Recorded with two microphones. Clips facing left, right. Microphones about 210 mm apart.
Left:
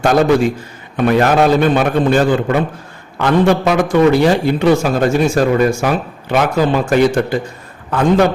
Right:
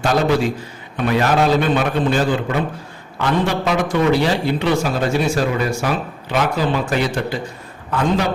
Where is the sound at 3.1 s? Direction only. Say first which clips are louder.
Left 7 dB; 50° left (ahead or behind).